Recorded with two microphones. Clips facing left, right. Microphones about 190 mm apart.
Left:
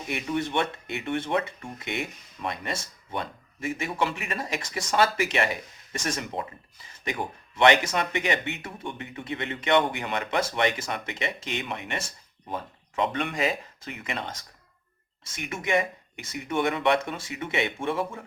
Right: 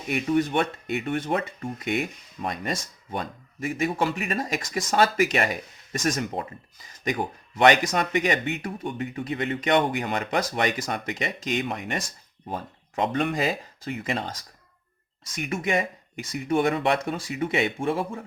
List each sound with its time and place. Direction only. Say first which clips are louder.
0.1 s speech: right 5 dB; 40° right (ahead or behind)
2.4 s speech: right 3 dB; 40° right (ahead or behind)
15.4 s speech: right 1 dB; 35° right (ahead or behind)